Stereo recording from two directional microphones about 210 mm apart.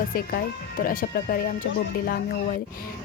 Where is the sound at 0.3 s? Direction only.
45° left (ahead or behind).